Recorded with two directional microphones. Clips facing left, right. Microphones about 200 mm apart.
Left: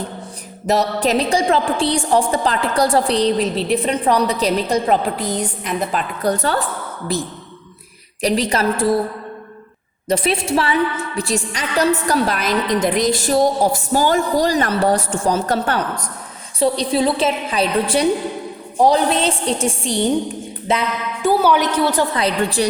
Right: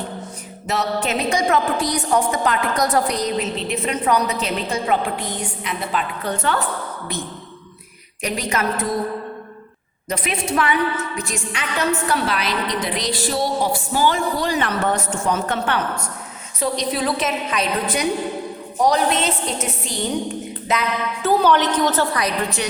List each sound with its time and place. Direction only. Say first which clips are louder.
0.7 s a woman's voice: left 5 dB; 35° left (ahead or behind)
8.2 s a woman's voice: left 5 dB; 35° left (ahead or behind)
10.1 s a woman's voice: left 5 dB; 30° left (ahead or behind)
21.2 s a woman's voice: left 2 dB; 10° left (ahead or behind)
22.1 s a woman's voice: left 4 dB; 30° left (ahead or behind)